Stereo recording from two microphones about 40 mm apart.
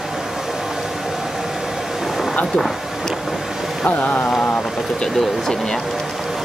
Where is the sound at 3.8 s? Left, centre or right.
Left.